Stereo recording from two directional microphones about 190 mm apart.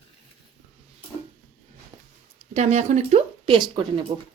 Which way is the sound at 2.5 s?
35° right (ahead or behind).